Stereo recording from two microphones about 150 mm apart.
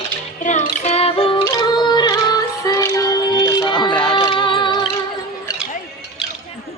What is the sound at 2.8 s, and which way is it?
Music, 25° left (ahead or behind).